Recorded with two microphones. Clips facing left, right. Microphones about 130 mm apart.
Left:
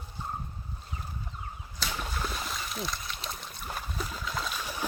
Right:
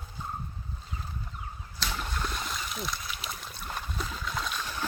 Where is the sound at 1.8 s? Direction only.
5° left (ahead or behind).